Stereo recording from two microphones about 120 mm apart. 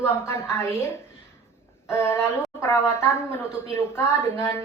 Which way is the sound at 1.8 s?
20° left (ahead or behind).